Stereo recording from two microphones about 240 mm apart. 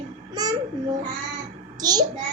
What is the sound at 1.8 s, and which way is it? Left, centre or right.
Speech, centre.